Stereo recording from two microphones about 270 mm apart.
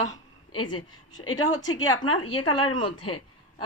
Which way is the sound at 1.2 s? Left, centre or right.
Left.